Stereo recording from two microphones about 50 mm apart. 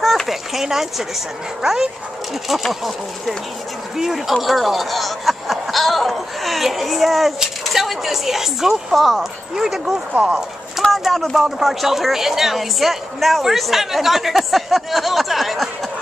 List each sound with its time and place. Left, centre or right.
0.0 s a sound: centre
1.6 s speech: centre
10.8 s speech: centre